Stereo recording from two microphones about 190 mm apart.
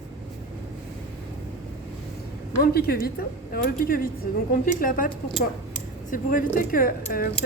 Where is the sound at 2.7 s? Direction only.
55° left (ahead or behind).